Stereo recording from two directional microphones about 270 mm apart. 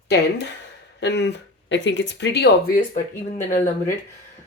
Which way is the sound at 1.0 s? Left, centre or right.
Left.